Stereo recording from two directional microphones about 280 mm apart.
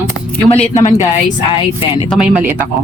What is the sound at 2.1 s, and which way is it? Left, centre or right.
Speech, centre.